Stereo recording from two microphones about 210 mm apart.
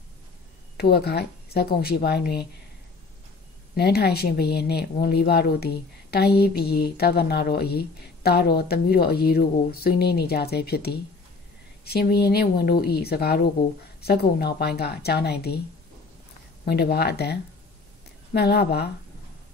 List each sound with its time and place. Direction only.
0.7 s a woman's voice: 50° left (ahead or behind)
3.7 s a woman's voice: 50° left (ahead or behind)
16.6 s a woman's voice: 50° left (ahead or behind)